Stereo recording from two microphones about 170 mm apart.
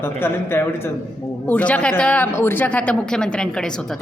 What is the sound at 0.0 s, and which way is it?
Speech, 15° left (ahead or behind).